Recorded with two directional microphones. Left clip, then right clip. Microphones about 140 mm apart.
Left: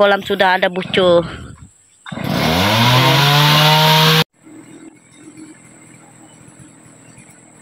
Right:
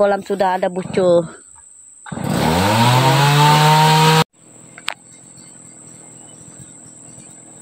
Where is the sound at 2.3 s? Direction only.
45° right (ahead or behind).